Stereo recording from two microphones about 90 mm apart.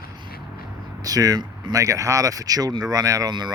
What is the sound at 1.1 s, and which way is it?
Speech, 40° right (ahead or behind).